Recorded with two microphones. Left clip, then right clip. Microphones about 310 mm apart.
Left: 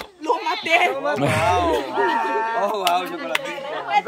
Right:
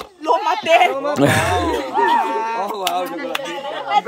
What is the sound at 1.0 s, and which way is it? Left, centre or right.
Speech, centre.